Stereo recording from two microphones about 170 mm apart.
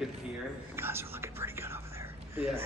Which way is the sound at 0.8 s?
15° right (ahead or behind).